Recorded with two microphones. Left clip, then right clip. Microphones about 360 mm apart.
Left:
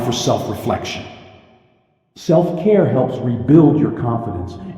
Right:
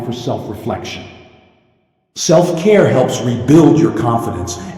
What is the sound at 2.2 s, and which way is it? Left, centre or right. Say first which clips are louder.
A man's voice: right 4 dB; right.